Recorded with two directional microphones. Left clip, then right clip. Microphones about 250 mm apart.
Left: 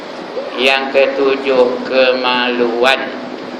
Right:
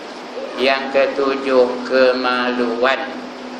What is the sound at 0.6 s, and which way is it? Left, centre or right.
Speech, right.